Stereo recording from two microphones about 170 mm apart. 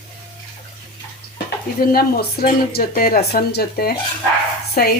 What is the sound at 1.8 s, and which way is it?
Speech, 60° left (ahead or behind).